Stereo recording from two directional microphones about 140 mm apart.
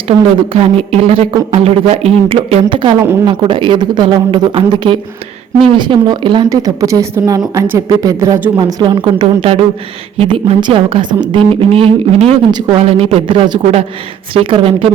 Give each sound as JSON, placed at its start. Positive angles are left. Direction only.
{"t": 0.1, "sound": "a woman's voice", "side_deg": -40}